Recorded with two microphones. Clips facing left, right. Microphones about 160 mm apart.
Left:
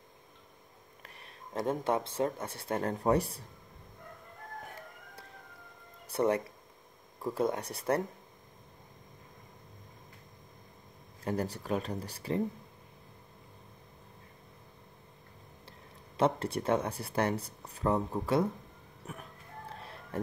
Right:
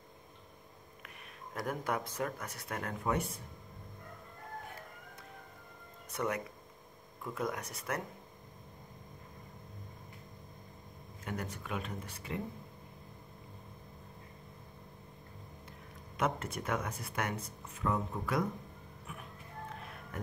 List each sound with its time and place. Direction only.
1.0 s speech: 25° left (ahead or behind)
6.0 s speech: 30° left (ahead or behind)
11.2 s speech: 35° left (ahead or behind)
16.2 s speech: 30° left (ahead or behind)
19.1 s speech: 40° left (ahead or behind)
19.8 s music: 30° left (ahead or behind)